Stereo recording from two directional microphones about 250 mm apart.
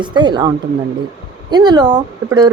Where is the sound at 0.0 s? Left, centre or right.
Centre.